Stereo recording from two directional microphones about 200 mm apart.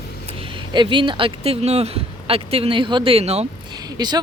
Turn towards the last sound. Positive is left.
turn(degrees=-20)  # may be behind; listen again after turning